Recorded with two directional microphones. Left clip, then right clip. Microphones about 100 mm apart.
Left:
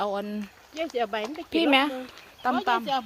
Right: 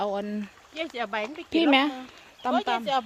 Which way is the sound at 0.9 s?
90° right.